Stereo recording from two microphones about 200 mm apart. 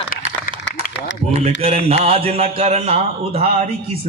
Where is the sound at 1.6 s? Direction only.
30° right (ahead or behind).